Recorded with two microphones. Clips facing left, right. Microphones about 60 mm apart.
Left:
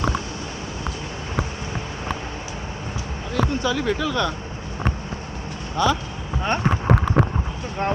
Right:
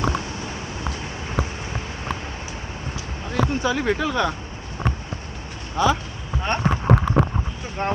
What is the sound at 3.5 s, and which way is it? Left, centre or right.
Speech, right.